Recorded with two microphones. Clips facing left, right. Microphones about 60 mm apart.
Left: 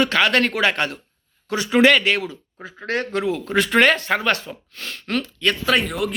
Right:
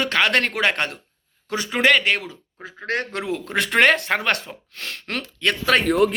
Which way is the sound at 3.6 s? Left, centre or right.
Right.